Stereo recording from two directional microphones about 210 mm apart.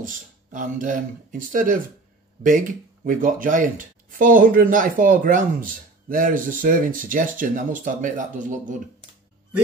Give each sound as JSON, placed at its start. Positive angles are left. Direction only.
{"t": 0.0, "sound": "speech", "side_deg": -40}